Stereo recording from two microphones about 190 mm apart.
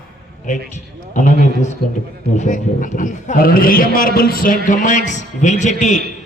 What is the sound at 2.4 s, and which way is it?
A man's voice, 40° left (ahead or behind).